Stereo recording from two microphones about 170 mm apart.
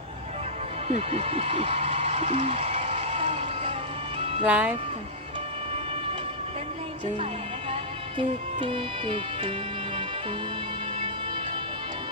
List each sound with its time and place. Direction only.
0.9 s a sound: 35° right (ahead or behind)
4.4 s speech: 10° right (ahead or behind)
8.2 s speech: 30° right (ahead or behind)